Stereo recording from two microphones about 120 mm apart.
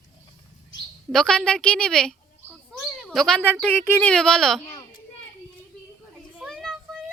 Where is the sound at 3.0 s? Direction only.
5° left (ahead or behind).